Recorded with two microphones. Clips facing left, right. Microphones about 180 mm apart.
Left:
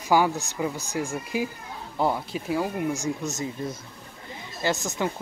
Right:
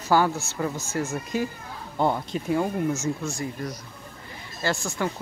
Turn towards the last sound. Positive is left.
turn(degrees=20)  # may be behind; listen again after turning